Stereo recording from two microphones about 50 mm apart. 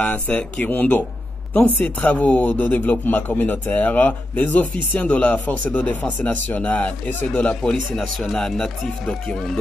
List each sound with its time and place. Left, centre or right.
0.0 s a man's voice: left
7.9 s speech: centre